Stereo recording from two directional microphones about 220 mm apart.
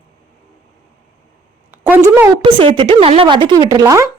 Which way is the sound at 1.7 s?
10° right (ahead or behind).